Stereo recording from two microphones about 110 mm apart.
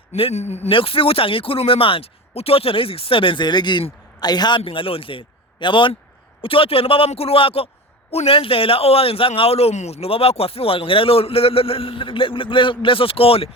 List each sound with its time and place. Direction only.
0.1 s speech: 75° left (ahead or behind)
0.7 s a man's voice: 55° left (ahead or behind)